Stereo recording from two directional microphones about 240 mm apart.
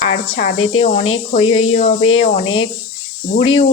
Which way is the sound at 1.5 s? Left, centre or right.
Left.